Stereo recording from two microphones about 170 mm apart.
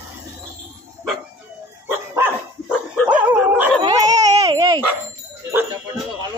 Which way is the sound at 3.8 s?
20° right (ahead or behind).